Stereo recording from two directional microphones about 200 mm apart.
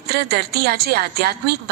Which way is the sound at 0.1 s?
50° right (ahead or behind).